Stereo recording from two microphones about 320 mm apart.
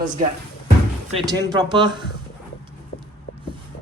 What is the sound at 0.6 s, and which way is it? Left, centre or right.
Music, centre.